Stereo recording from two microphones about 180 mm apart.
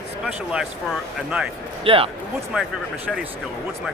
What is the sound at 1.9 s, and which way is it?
Speech, 30° right (ahead or behind).